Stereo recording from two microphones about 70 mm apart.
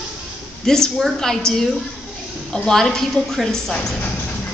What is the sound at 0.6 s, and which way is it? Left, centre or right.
A woman's voice, centre.